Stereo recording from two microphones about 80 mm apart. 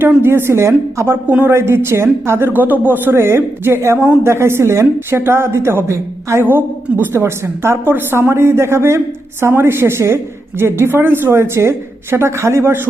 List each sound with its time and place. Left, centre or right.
0.0 s a woman's voice: right